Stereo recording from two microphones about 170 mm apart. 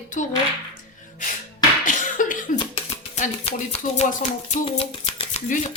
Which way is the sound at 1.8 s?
50° left (ahead or behind).